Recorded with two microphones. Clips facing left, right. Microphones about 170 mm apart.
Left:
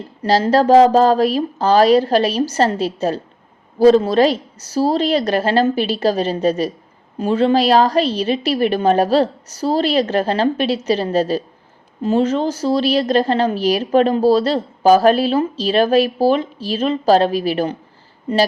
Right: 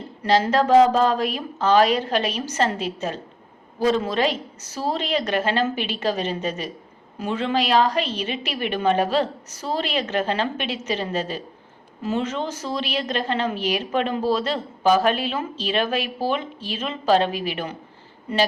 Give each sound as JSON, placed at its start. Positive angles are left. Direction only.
{"t": 0.2, "sound": "a woman's voice", "side_deg": 35}